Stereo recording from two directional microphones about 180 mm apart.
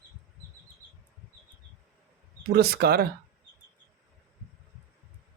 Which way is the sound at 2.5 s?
60° right (ahead or behind).